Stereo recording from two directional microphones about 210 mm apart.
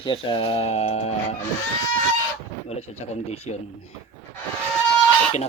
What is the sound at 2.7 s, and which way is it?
Speech, 30° left (ahead or behind).